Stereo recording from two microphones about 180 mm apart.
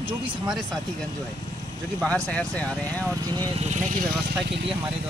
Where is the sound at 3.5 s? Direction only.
40° right (ahead or behind).